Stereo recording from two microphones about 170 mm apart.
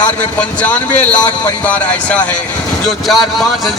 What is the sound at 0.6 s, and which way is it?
A man's voice, 10° left (ahead or behind).